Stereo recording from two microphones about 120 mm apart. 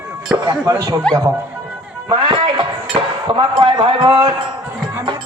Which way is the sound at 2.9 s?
45° right (ahead or behind).